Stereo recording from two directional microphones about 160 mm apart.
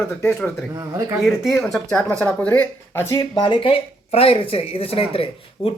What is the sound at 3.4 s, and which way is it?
Speech, 35° left (ahead or behind).